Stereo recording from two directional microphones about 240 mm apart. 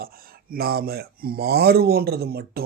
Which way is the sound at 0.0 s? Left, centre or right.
Right.